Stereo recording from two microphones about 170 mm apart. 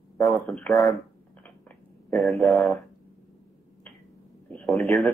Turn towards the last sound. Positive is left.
turn(degrees=0)  # may be behind; listen again after turning